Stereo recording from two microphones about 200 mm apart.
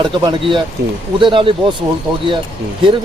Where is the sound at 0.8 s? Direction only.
55° right (ahead or behind).